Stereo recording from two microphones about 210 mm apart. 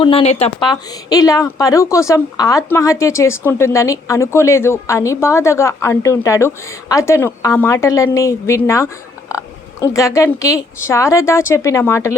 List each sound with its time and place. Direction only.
0.0 s speech: 25° left (ahead or behind)
1.1 s a woman's voice: 15° left (ahead or behind)
9.3 s oink: 15° left (ahead or behind)
9.8 s a woman's voice: 15° left (ahead or behind)